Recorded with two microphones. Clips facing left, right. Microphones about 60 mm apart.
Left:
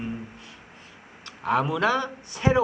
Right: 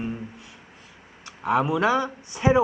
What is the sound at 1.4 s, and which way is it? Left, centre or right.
Speech, centre.